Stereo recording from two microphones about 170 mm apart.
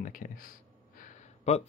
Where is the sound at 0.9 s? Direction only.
45° left (ahead or behind).